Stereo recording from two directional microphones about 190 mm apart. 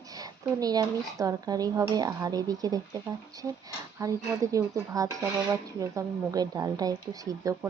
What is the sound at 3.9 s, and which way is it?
Speech, 15° right (ahead or behind).